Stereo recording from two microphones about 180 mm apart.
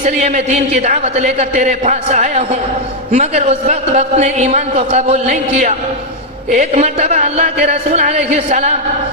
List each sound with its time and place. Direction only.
0.0 s speech: 40° right (ahead or behind)